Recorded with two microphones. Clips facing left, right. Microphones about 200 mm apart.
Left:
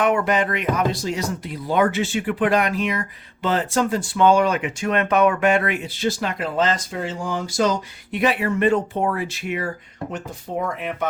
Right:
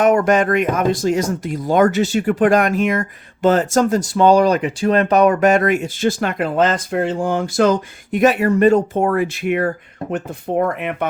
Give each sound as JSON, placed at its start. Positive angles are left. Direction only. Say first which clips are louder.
{"t": 0.0, "sound": "speech", "louder": "right 6 dB", "side_deg": -45}